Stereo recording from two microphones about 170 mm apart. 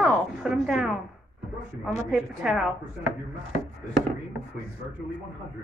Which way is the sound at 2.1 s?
5° right (ahead or behind).